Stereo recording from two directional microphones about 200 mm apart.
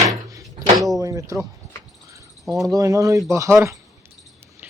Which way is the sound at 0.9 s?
15° right (ahead or behind).